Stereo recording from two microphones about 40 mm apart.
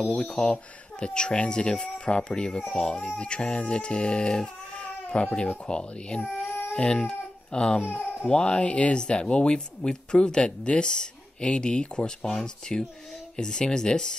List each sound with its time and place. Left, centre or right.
0.2 s speech: left
4.8 s baby cry: left
5.7 s speech: left
7.8 s speech: left
8.3 s speech: left
12.4 s speech: centre